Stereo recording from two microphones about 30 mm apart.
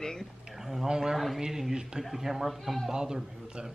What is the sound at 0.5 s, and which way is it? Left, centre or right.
Speech, centre.